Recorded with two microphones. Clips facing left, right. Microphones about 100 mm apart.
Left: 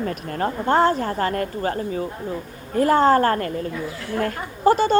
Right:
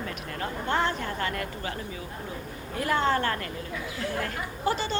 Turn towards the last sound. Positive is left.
turn(degrees=45)  # may be behind; listen again after turning